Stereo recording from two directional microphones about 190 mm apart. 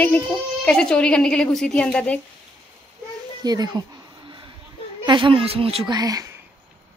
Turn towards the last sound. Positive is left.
turn(degrees=-20)  # may be behind; listen again after turning